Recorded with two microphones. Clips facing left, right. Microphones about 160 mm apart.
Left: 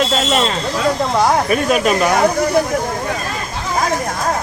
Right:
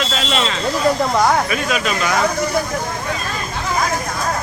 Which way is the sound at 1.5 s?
45° left (ahead or behind).